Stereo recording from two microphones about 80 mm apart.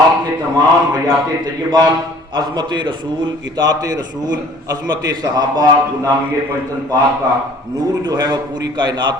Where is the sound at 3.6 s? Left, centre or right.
Right.